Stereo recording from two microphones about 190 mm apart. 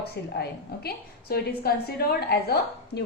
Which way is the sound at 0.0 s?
55° left (ahead or behind).